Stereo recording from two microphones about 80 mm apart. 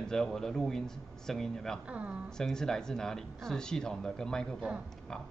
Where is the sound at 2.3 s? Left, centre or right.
Centre.